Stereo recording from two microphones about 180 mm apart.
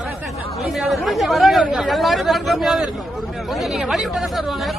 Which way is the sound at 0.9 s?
Centre (ahead or behind).